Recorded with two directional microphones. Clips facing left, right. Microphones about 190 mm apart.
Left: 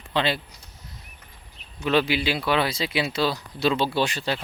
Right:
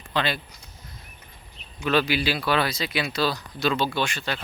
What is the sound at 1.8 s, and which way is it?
Speech, 25° left (ahead or behind).